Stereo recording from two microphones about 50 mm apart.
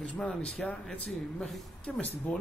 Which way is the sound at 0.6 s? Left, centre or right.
Centre.